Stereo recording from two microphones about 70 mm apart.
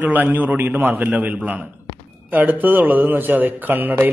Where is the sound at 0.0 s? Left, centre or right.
Right.